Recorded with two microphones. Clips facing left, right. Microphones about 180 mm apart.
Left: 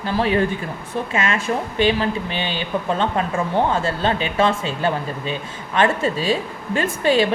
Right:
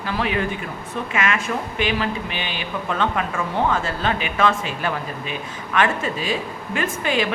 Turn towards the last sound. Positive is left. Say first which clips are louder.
# left 5 dB
turn(degrees=35)  # may be behind; listen again after turning